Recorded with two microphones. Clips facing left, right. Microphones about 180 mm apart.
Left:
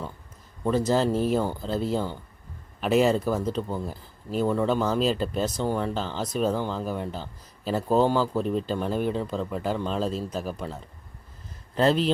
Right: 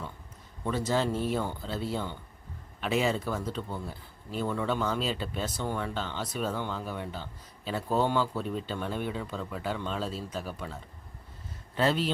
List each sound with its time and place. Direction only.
0.6 s a man's voice: 40° left (ahead or behind)